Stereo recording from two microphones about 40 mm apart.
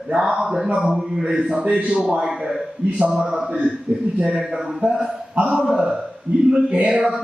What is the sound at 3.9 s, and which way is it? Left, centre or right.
Speech, right.